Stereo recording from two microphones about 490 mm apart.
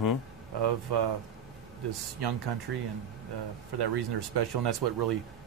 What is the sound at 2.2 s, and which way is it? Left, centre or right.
Speech, right.